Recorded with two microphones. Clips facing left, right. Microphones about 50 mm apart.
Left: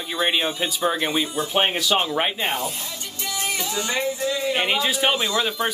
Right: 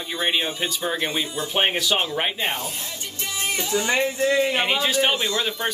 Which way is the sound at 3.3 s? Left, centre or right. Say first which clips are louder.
Right 2 dB; right.